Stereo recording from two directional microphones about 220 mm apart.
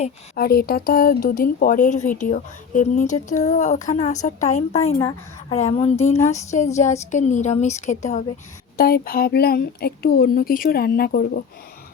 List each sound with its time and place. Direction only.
0.3 s a woman's voice: 45° left (ahead or behind)
4.9 s a woman's voice: 15° left (ahead or behind)
5.5 s a woman's voice: 30° left (ahead or behind)
8.8 s speech: 45° left (ahead or behind)